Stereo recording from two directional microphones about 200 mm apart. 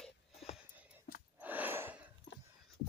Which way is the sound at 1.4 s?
10° right (ahead or behind).